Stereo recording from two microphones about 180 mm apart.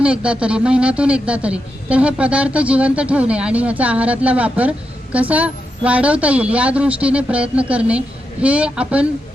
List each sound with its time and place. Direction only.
0.0 s speech: 5° right (ahead or behind)